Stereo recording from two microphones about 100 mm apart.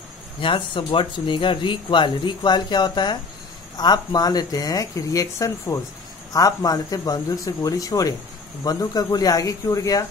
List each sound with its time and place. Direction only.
0.4 s speech: 60° left (ahead or behind); by 10.0 s 35° left (ahead or behind)